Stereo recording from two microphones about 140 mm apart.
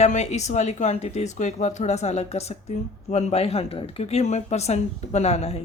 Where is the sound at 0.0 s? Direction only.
55° left (ahead or behind).